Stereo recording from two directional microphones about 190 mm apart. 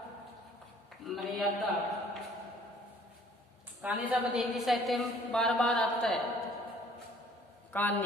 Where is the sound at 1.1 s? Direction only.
Centre (ahead or behind).